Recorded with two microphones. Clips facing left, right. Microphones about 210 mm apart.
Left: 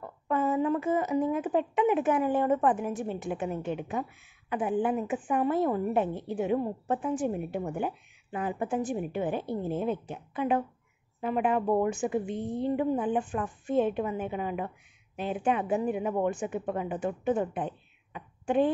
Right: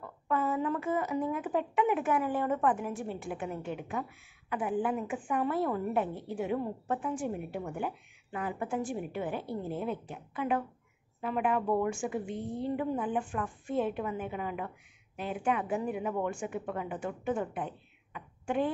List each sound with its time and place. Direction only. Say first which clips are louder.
0.3 s a woman's voice: left 4 dB; 20° left (ahead or behind)